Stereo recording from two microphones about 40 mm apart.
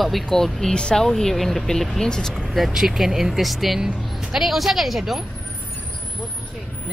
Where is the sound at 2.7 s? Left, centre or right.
Centre.